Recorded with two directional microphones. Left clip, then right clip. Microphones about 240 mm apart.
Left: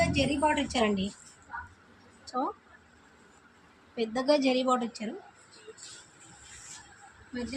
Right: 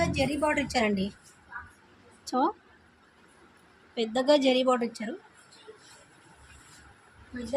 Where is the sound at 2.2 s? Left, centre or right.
Right.